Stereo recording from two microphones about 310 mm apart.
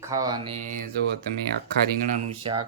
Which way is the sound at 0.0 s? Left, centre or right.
Centre.